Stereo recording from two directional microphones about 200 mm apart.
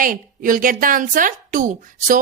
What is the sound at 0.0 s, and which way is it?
A woman's voice, 45° right (ahead or behind).